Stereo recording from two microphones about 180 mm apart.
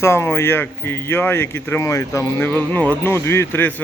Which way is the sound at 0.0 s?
15° left (ahead or behind).